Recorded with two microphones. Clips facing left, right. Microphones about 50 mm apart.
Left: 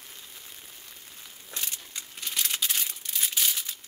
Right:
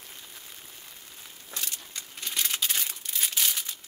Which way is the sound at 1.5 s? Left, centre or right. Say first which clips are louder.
Even; centre.